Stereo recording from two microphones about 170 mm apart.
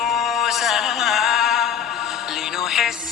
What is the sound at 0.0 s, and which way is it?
Music, centre (ahead or behind).